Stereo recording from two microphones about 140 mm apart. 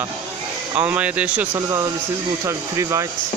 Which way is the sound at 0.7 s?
10° right (ahead or behind).